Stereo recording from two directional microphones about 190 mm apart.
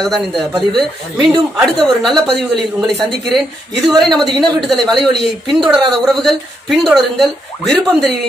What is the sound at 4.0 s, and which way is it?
Speech, centre (ahead or behind).